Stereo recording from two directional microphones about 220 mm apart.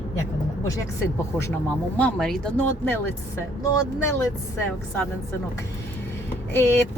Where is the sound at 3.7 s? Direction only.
15° left (ahead or behind).